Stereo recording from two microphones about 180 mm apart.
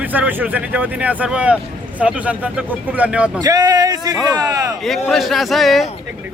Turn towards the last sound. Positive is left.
turn(degrees=0)  # may be behind; listen again after turning